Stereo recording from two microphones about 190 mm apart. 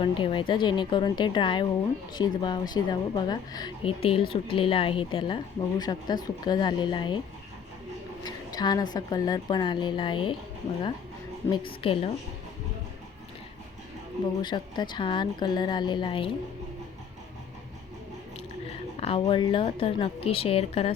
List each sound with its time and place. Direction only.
0.0 s a woman's voice: 30° left (ahead or behind)
8.2 s a woman's voice: 20° left (ahead or behind)
11.4 s a woman's voice: 25° left (ahead or behind)
14.4 s a woman's voice: 25° left (ahead or behind)
18.9 s a woman's voice: 30° left (ahead or behind)